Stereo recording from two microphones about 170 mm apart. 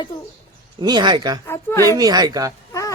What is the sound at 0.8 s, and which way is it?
Speech, 25° right (ahead or behind).